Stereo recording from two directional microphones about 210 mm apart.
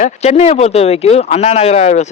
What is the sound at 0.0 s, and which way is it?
Speech, 30° left (ahead or behind).